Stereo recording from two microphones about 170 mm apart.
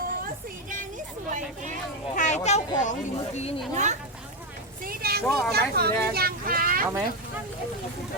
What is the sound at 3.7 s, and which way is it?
Speech, 45° right (ahead or behind).